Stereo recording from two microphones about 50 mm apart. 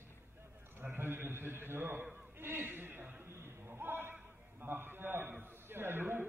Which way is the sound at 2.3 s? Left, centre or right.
Right.